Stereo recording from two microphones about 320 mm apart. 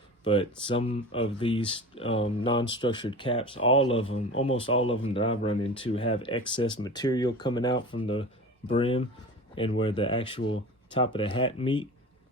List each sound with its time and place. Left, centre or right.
0.3 s speech: centre
4.0 s speech: left
4.9 s speech: centre